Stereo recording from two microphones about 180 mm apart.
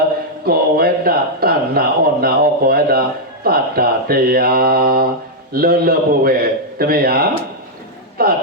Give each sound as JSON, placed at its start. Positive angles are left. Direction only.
{"t": 0.4, "sound": "a man's voice", "side_deg": -55}